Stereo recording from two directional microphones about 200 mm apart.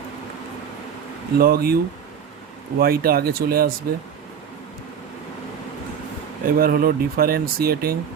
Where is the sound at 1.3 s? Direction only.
50° right (ahead or behind).